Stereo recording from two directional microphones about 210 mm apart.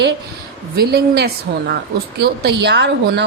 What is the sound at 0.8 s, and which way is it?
A woman's voice, 50° right (ahead or behind).